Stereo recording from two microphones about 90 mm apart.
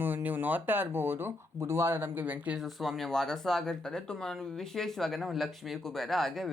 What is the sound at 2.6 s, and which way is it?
Speech, centre (ahead or behind).